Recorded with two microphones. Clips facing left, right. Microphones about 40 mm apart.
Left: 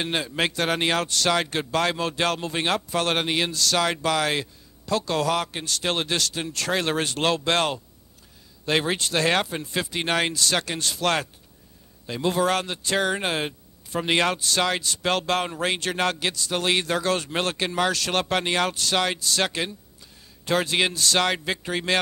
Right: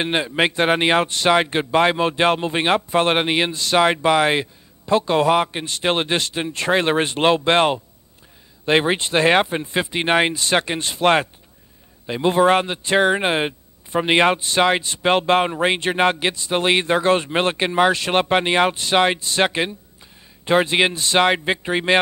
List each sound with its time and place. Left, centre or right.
0.0 s speech: right